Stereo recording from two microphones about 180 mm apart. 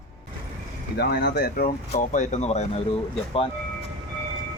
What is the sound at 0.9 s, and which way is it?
Speech, 65° left (ahead or behind).